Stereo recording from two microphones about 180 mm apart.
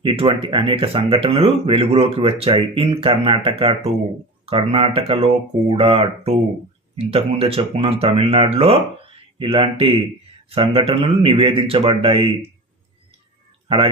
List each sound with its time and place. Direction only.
0.0 s speech: 30° right (ahead or behind)
13.7 s speech: 30° right (ahead or behind)